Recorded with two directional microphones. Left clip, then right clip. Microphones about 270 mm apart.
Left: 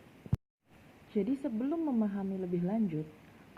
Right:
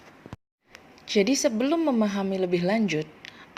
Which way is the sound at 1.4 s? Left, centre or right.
Right.